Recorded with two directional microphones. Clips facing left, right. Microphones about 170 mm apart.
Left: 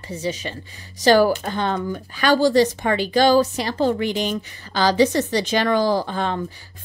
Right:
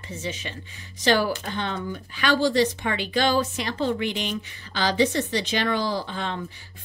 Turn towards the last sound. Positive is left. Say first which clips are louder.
# left 7 dB
turn(degrees=45)  # may be behind; listen again after turning